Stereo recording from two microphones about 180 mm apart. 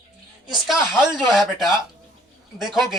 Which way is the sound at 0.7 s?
Centre (ahead or behind).